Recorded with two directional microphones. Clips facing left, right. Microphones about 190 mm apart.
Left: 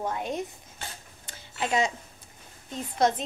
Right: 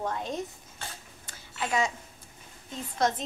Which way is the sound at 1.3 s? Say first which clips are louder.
Left 3 dB; 20° left (ahead or behind).